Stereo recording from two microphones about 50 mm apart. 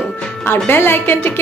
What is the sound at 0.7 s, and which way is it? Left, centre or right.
Speech, left.